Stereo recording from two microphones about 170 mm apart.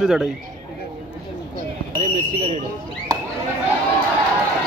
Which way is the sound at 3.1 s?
20° right (ahead or behind).